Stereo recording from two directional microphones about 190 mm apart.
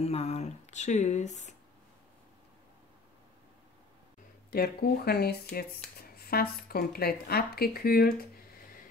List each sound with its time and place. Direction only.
0.0 s speech: 35° left (ahead or behind)
4.5 s speech: 55° left (ahead or behind)